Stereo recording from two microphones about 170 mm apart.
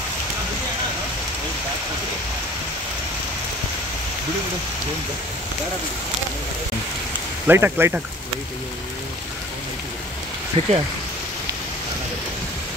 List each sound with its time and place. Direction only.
7.4 s speech: 15° right (ahead or behind)
10.6 s speech: 40° right (ahead or behind)